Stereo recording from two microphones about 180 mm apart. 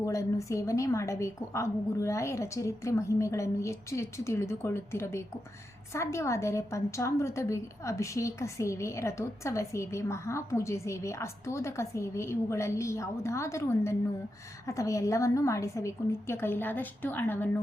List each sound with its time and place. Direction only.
0.0 s a woman's voice: 15° left (ahead or behind)